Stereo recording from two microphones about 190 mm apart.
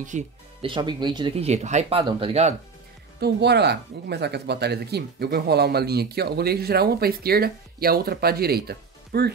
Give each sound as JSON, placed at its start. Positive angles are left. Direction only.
{"t": 0.1, "sound": "speech", "side_deg": -40}
{"t": 0.6, "sound": "speech", "side_deg": -25}
{"t": 3.2, "sound": "speech", "side_deg": -60}